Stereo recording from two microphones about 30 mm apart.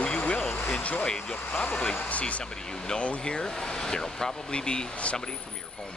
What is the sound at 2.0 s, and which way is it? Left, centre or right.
Speech, left.